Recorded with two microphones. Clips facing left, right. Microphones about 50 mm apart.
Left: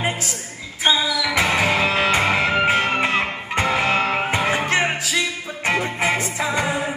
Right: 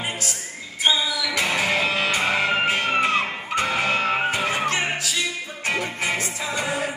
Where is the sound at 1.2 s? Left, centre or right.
Left.